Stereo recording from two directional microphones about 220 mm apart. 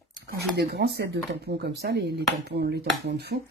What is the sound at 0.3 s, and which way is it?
Speech, 45° right (ahead or behind).